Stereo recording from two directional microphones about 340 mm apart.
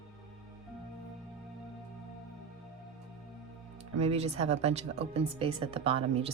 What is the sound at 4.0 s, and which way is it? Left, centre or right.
Speech, centre.